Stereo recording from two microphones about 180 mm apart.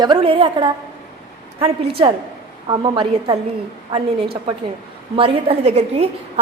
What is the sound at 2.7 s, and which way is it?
Speech, 25° right (ahead or behind).